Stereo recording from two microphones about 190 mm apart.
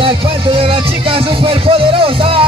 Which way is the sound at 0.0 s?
30° right (ahead or behind).